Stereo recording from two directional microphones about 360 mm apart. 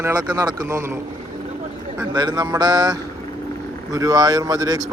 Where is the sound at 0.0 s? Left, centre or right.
Centre.